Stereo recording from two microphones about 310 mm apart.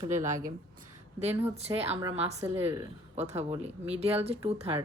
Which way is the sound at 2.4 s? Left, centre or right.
Centre.